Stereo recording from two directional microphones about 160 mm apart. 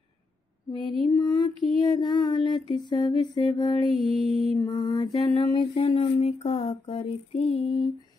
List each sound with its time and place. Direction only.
0.7 s music: centre (ahead or behind)
1.1 s female singing: 30° left (ahead or behind)
3.9 s music: centre (ahead or behind)
4.6 s mantra: 30° left (ahead or behind)